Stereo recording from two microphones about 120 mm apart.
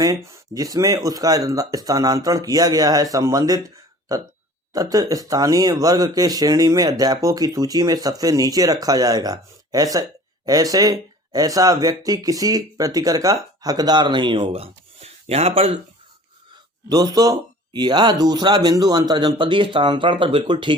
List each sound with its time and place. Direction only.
0.3 s speech: 30° right (ahead or behind); by 15.8 s 55° right (ahead or behind)
16.9 s speech: 30° right (ahead or behind)